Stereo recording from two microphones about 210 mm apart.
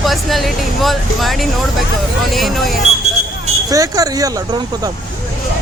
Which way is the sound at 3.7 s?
15° right (ahead or behind).